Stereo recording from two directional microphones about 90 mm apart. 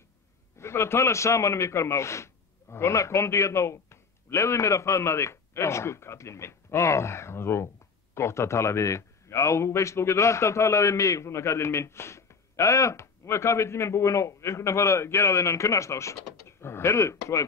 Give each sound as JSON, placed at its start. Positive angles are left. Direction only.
{"t": 0.6, "sound": "speech", "side_deg": 30}